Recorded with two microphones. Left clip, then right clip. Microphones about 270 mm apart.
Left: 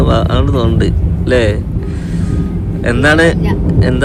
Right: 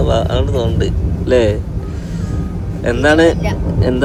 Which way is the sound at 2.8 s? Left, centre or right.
Left.